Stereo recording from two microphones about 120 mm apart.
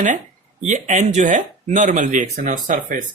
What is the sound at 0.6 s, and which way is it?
Speech, 90° right.